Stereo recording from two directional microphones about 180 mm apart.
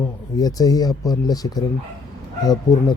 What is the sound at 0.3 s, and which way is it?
Speech, 20° left (ahead or behind).